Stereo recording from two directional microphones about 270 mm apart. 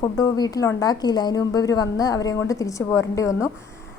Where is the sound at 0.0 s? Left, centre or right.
Centre.